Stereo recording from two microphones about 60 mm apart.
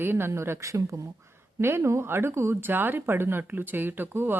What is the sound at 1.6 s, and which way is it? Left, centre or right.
A woman's voice, right.